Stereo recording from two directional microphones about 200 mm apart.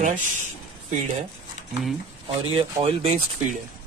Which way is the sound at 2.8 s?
30° right (ahead or behind).